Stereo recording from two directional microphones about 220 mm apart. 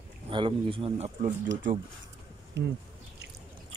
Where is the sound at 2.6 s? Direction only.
50° right (ahead or behind).